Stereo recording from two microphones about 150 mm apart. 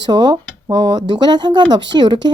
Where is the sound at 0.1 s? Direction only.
30° right (ahead or behind).